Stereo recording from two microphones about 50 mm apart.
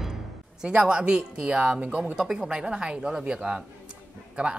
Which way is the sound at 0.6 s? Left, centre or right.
Centre.